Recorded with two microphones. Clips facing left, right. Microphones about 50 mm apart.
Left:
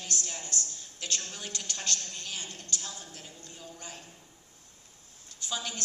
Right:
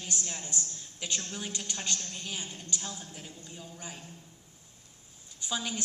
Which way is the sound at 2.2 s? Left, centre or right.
Centre.